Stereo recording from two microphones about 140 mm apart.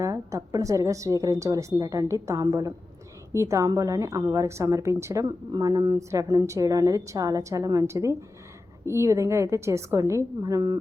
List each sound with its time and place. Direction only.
0.0 s a woman's voice: 20° right (ahead or behind)